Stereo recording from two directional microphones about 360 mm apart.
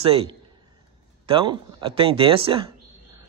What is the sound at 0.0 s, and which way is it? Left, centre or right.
A man's voice, centre.